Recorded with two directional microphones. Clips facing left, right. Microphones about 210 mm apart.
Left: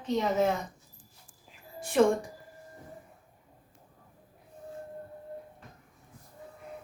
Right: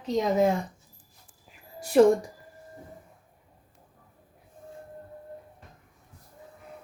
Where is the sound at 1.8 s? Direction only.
40° right (ahead or behind).